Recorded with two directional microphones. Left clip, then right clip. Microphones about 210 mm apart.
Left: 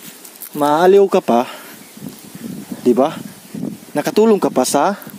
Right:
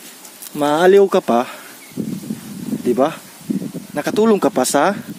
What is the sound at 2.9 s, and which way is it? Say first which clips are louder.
Speech: left 1 dB; 15° left (ahead or behind).